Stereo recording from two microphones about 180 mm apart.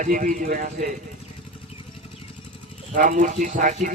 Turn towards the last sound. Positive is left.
turn(degrees=-45)  # may be behind; listen again after turning